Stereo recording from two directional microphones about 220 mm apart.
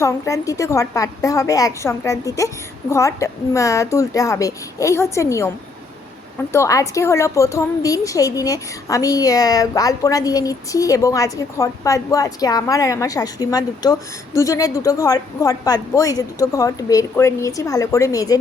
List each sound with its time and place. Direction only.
0.0 s a woman's voice: 15° left (ahead or behind)
6.5 s a woman's voice: 15° left (ahead or behind)